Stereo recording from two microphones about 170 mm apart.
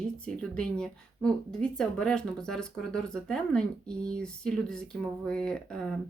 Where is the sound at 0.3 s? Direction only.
5° left (ahead or behind).